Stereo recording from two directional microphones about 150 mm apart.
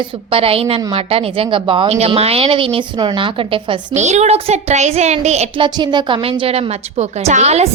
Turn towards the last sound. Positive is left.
turn(degrees=-45)  # may be behind; listen again after turning